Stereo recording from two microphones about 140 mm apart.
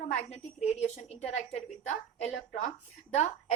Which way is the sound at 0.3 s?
55° left (ahead or behind).